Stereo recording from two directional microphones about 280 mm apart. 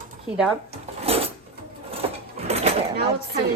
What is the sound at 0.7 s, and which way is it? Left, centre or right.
Drawer open or close, right.